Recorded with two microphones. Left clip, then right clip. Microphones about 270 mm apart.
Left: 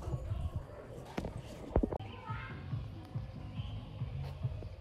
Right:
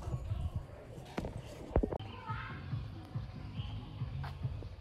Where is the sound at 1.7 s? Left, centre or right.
Centre.